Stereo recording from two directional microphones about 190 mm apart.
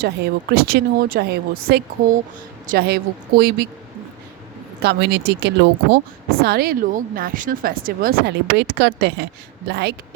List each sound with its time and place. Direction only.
0.0 s speech: 55° right (ahead or behind)
4.8 s speech: 60° right (ahead or behind)